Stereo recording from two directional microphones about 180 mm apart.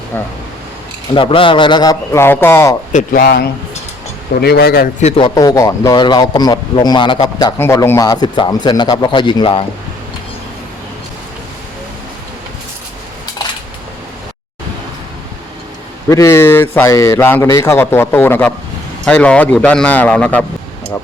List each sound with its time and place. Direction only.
1.1 s a man's voice: 30° left (ahead or behind); by 2.7 s 15° left (ahead or behind)
2.9 s a man's voice: 50° left (ahead or behind)
4.9 s a man's voice: 35° left (ahead or behind)
5.3 s a man's voice: 20° left (ahead or behind)
16.0 s speech: 15° left (ahead or behind)